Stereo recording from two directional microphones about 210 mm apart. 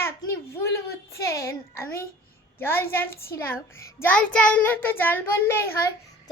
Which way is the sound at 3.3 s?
10° left (ahead or behind).